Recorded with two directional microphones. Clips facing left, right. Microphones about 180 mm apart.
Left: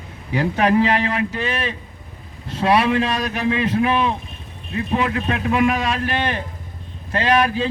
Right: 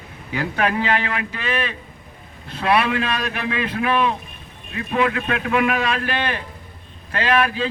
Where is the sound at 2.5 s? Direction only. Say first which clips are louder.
Left 2 dB; 35° left (ahead or behind).